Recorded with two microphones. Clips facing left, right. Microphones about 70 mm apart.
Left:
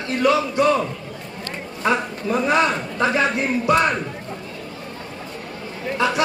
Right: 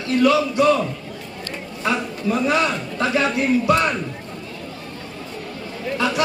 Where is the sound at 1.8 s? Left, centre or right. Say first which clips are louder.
Left 1 dB; left.